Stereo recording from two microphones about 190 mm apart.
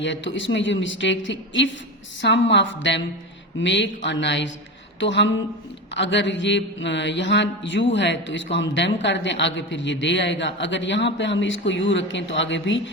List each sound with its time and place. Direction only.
0.0 s speech: 75° left (ahead or behind)